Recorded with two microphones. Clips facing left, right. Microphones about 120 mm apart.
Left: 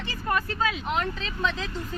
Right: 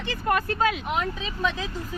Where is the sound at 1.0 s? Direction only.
10° right (ahead or behind).